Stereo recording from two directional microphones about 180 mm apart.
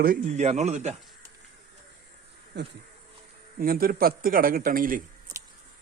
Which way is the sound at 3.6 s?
55° right (ahead or behind).